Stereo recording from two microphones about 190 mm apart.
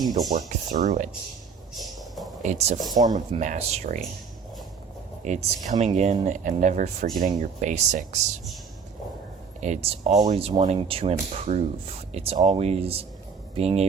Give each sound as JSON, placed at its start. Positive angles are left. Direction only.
{"t": 0.3, "sound": "speech", "side_deg": -45}
{"t": 1.7, "sound": "a sound", "side_deg": 0}
{"t": 2.4, "sound": "speech", "side_deg": -35}
{"t": 2.8, "sound": "speech", "side_deg": -20}
{"t": 3.2, "sound": "speech", "side_deg": -40}
{"t": 5.2, "sound": "speech", "side_deg": -40}
{"t": 9.6, "sound": "speech", "side_deg": -35}